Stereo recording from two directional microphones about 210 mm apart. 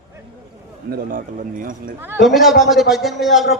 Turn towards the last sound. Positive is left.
turn(degrees=0)  # may be behind; listen again after turning